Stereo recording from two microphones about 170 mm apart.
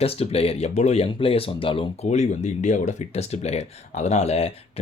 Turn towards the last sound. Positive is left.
turn(degrees=40)  # may be behind; listen again after turning